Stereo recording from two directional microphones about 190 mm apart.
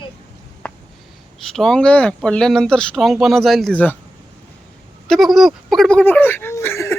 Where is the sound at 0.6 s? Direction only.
5° left (ahead or behind).